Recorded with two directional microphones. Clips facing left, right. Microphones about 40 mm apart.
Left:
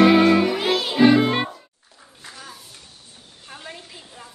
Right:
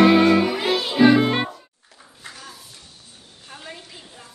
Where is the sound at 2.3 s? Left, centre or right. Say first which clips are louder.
Left 1 dB; centre.